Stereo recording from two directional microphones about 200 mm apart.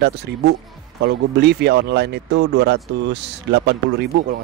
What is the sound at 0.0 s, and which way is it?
Speech, 55° right (ahead or behind).